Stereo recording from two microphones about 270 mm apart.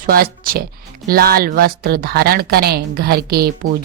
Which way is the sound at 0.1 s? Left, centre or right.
Right.